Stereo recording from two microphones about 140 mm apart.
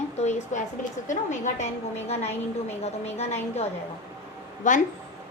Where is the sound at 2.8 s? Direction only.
50° left (ahead or behind).